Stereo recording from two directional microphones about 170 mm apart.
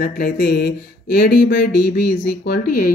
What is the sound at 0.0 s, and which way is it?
Speech, 65° left (ahead or behind).